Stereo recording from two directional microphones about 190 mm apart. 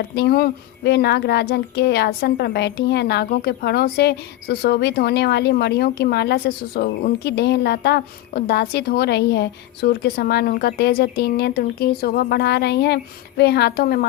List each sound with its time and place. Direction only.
0.2 s speech: 55° left (ahead or behind)